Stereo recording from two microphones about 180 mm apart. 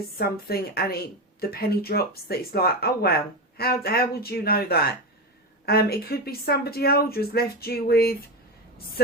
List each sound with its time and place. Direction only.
0.2 s speech: 60° left (ahead or behind)